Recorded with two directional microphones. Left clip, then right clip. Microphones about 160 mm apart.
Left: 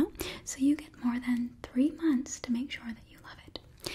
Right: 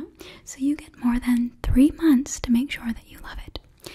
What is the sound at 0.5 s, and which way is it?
Whispering, 15° right (ahead or behind).